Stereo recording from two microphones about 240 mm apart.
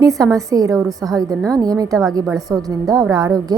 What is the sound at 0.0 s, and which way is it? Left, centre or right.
A woman's voice, centre.